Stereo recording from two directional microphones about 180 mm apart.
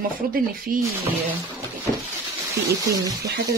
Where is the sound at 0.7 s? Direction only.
50° right (ahead or behind).